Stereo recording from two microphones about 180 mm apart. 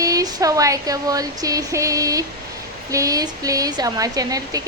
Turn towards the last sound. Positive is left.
turn(degrees=-20)  # may be behind; listen again after turning